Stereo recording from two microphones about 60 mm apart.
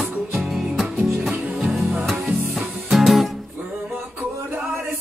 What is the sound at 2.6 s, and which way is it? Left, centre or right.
Music, centre.